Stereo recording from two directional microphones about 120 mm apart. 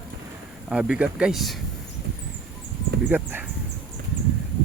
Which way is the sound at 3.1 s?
15° right (ahead or behind).